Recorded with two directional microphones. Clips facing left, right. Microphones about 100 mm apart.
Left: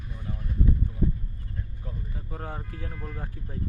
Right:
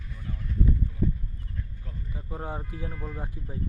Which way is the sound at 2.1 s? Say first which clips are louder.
Right 4 dB; 10° right (ahead or behind).